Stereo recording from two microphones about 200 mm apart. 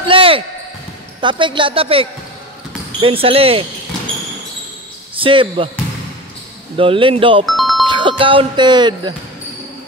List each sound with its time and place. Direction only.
0.1 s basketball bounce: 25° right (ahead or behind)
1.2 s a woman's voice: 25° right (ahead or behind)
5.1 s speech: 25° right (ahead or behind)
6.8 s a woman's voice: 25° right (ahead or behind)
7.4 s music: centre (ahead or behind)
7.8 s speech: 25° right (ahead or behind)